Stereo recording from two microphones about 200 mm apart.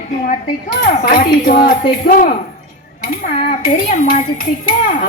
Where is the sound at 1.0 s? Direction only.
45° left (ahead or behind).